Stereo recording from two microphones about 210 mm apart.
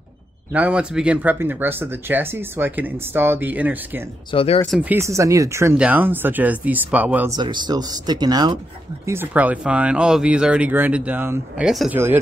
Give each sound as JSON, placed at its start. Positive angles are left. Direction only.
{"t": 0.5, "sound": "speech", "side_deg": -5}
{"t": 4.3, "sound": "speech", "side_deg": 25}
{"t": 4.6, "sound": "speech", "side_deg": -5}
{"t": 7.3, "sound": "speech", "side_deg": -20}